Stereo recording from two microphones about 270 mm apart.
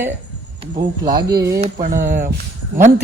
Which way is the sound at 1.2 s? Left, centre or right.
Centre.